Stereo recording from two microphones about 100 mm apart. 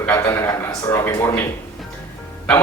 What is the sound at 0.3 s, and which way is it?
A man's voice, 25° left (ahead or behind).